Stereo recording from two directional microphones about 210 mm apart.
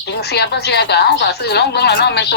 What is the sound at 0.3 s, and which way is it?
A woman's voice, 50° left (ahead or behind).